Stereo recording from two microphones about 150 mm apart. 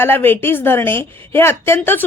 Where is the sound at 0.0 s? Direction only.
15° left (ahead or behind).